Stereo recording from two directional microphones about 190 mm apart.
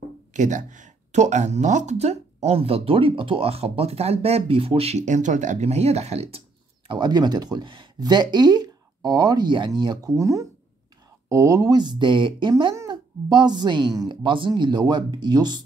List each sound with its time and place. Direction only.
0.3 s speech: 40° right (ahead or behind)
6.9 s speech: 25° right (ahead or behind)